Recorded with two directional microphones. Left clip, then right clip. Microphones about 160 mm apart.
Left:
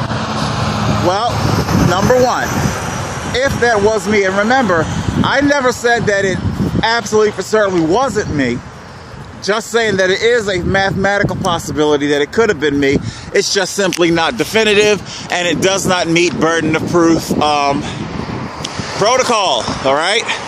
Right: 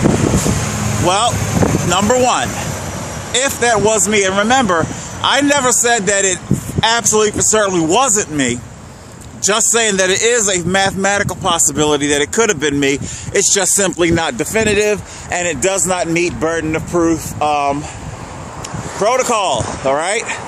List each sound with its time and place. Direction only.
0.6 s vehicle: 45° right (ahead or behind)
1.0 s a man's voice: 15° right (ahead or behind)
14.5 s speech: centre (ahead or behind)
19.0 s speech: 5° right (ahead or behind)